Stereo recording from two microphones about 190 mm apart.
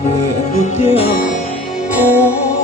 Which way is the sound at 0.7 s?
35° left (ahead or behind).